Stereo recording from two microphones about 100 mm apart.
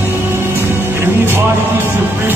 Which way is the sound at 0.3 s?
25° right (ahead or behind).